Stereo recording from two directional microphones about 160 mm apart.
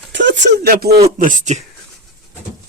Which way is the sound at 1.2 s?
55° right (ahead or behind).